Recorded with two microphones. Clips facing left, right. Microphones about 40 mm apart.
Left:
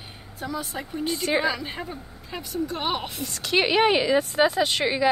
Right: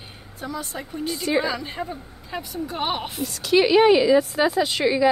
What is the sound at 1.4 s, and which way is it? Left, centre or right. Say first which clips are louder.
A woman's voice: right 1 dB; centre.